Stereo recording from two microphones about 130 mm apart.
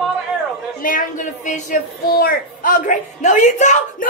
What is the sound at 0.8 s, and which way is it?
Speech, 80° left.